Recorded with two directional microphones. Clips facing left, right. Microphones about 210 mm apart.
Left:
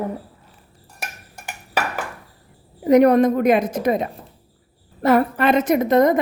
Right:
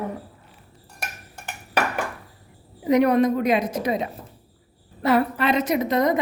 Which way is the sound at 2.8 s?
45° left (ahead or behind).